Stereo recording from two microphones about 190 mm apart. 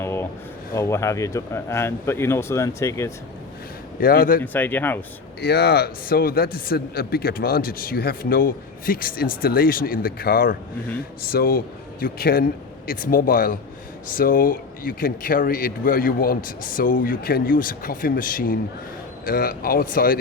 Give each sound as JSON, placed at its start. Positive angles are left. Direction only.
{"t": 0.0, "sound": "a sound", "side_deg": 15}
{"t": 0.7, "sound": "speech", "side_deg": 15}
{"t": 4.0, "sound": "a man's voice", "side_deg": 45}
{"t": 4.5, "sound": "speech", "side_deg": 10}
{"t": 5.4, "sound": "a man's voice", "side_deg": 55}